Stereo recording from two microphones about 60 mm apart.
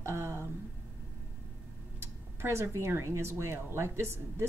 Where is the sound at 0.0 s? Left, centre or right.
Right.